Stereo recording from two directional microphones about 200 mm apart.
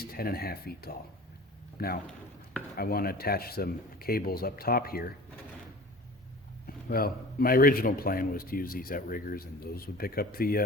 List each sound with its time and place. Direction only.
0.0 s speech: 50° left (ahead or behind)
2.0 s chopping: 5° left (ahead or behind)
2.7 s a man's voice: 50° left (ahead or behind)
6.7 s a man's voice: 45° left (ahead or behind)